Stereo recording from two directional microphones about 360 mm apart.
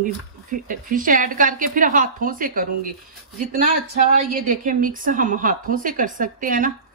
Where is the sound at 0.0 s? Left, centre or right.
Right.